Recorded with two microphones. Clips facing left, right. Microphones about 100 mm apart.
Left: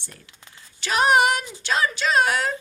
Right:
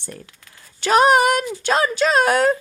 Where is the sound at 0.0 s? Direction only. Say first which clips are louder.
Right 10 dB; 45° right (ahead or behind).